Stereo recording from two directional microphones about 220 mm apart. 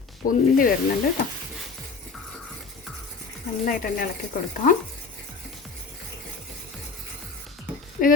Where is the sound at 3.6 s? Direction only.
40° left (ahead or behind).